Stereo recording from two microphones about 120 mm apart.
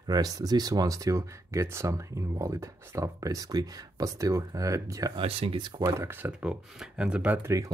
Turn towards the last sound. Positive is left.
turn(degrees=-10)  # may be behind; listen again after turning